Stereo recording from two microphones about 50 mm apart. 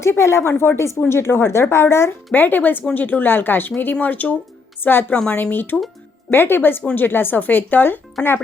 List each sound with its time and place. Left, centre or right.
0.0 s speech: left
2.3 s speech: left
4.0 s speech: left
4.8 s speech: left